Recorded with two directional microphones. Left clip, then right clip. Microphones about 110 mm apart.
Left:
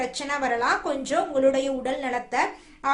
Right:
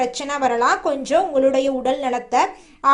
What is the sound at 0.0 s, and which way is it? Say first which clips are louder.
A woman's voice: right 6 dB; 50° right (ahead or behind).